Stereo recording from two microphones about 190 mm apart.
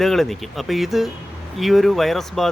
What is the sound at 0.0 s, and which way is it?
Speech, centre (ahead or behind).